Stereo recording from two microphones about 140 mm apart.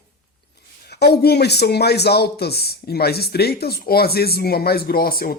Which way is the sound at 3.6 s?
90° left.